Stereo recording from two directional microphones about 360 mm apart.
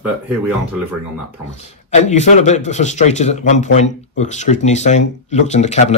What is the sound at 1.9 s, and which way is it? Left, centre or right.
A man's voice, centre.